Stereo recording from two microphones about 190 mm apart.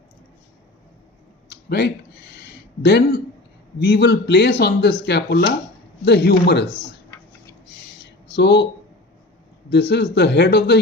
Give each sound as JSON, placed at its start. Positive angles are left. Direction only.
{"t": 1.5, "sound": "a sound", "side_deg": 60}
{"t": 3.8, "sound": "speech", "side_deg": 60}
{"t": 8.3, "sound": "speech", "side_deg": 65}
{"t": 9.6, "sound": "speech", "side_deg": 65}